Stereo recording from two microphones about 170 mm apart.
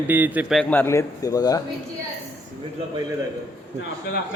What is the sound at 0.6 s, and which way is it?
A man's voice, 10° left (ahead or behind).